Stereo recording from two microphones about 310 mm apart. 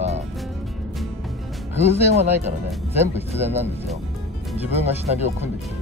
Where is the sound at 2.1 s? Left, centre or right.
Right.